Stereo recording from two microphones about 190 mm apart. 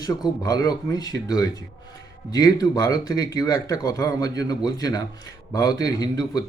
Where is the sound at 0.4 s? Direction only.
20° left (ahead or behind).